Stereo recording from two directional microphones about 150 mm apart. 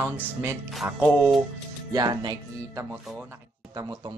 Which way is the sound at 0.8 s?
15° right (ahead or behind).